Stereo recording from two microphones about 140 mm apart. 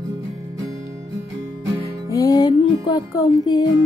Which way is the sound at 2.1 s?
25° left (ahead or behind).